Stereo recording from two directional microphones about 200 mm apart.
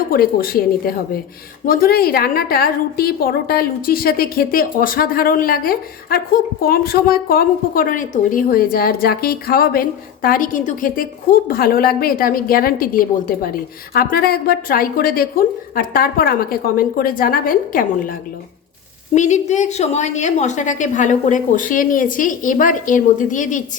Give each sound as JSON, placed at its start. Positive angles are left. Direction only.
{"t": 0.1, "sound": "a woman's voice", "side_deg": 45}